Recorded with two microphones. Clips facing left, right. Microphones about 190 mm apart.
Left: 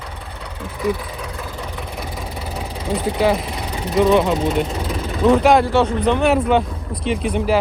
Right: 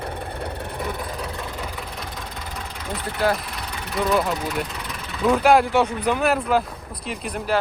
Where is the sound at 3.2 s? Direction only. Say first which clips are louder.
Left 2 dB; centre (ahead or behind).